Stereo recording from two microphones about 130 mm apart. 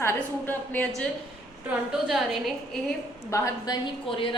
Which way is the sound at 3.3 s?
30° left (ahead or behind).